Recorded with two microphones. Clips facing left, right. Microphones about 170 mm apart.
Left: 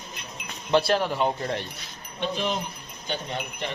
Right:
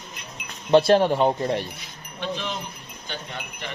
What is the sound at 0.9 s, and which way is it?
Speech, 25° right (ahead or behind).